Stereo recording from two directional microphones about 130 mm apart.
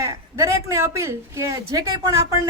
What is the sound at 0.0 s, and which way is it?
Speech, 20° right (ahead or behind).